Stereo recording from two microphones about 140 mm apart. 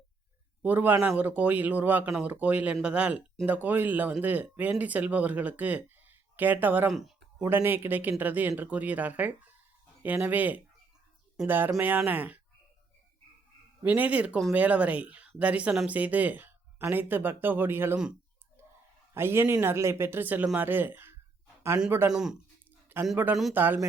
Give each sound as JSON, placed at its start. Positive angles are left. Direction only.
{"t": 0.6, "sound": "speech", "side_deg": -10}
{"t": 13.8, "sound": "speech", "side_deg": -10}
{"t": 19.1, "sound": "speech", "side_deg": -15}
{"t": 22.1, "sound": "speech", "side_deg": -5}